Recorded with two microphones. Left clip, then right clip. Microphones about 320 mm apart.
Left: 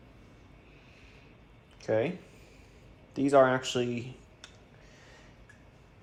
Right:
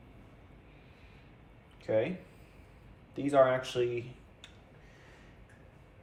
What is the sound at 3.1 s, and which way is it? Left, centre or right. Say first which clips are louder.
Speech: left 3 dB; left.